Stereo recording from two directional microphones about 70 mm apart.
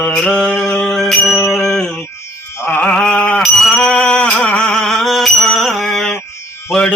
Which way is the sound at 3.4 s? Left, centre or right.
Centre.